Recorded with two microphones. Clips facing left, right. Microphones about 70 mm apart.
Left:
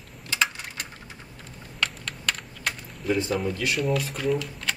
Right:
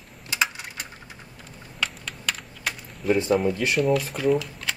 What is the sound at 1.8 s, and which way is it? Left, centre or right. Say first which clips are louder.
Typing: left 1 dB; centre.